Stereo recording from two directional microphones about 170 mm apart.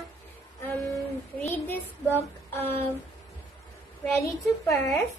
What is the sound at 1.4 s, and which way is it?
A child's voice, 10° left (ahead or behind).